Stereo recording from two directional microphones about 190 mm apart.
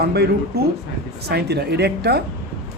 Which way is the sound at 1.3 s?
60° right (ahead or behind).